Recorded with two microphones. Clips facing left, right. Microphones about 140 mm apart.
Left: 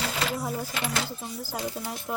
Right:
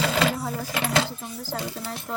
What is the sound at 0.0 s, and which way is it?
Sewing machine, 90° right.